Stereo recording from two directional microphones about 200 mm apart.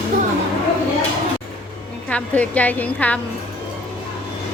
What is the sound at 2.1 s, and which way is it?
A woman's voice, 5° left (ahead or behind).